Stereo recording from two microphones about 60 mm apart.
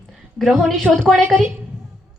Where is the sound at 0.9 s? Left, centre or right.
Right.